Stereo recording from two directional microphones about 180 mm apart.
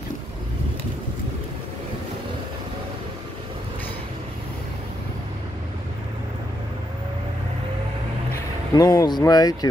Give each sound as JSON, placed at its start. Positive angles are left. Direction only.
{"t": 8.7, "sound": "speech", "side_deg": 20}